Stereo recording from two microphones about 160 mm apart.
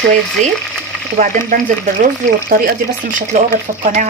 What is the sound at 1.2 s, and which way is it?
Speech, 60° right (ahead or behind).